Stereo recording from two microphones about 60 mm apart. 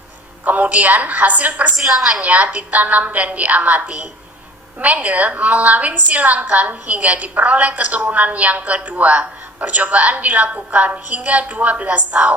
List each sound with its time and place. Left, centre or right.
0.4 s a woman's voice: right
1.7 s a woman's voice: centre
2.2 s a woman's voice: right